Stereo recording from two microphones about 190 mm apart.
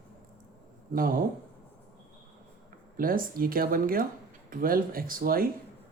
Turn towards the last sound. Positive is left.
turn(degrees=-50)  # may be behind; listen again after turning